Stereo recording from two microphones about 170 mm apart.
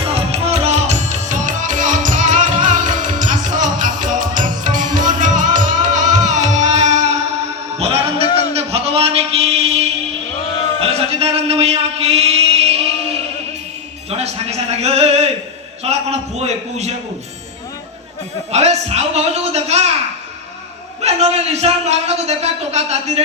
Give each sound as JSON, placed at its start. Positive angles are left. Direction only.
{"t": 0.1, "sound": "music", "side_deg": -35}
{"t": 7.8, "sound": "a sound", "side_deg": -35}
{"t": 14.1, "sound": "a sound", "side_deg": -35}
{"t": 15.8, "sound": "a man's voice", "side_deg": -40}
{"t": 18.5, "sound": "a man's voice", "side_deg": -40}
{"t": 21.0, "sound": "a man's voice", "side_deg": -40}